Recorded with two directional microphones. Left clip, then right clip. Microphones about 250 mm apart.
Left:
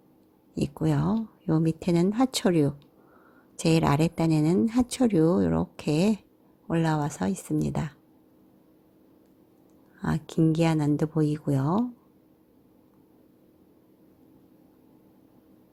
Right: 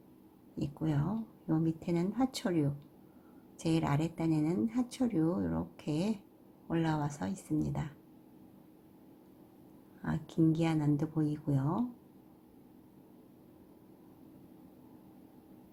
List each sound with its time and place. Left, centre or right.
0.5 s speech: left
10.0 s speech: left